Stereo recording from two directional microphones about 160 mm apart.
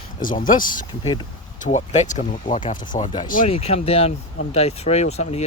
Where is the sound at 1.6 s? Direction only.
45° left (ahead or behind).